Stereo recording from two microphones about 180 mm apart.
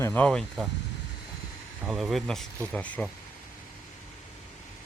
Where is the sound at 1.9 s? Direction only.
Centre (ahead or behind).